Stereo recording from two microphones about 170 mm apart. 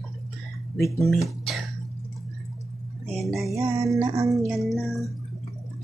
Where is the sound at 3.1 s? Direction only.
Centre (ahead or behind).